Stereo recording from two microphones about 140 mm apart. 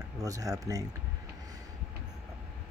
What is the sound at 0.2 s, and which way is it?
Speech, 25° right (ahead or behind).